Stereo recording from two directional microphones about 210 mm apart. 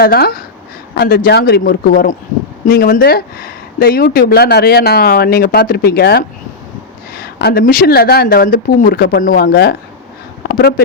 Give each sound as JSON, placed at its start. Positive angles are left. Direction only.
{"t": 0.0, "sound": "speech", "side_deg": 45}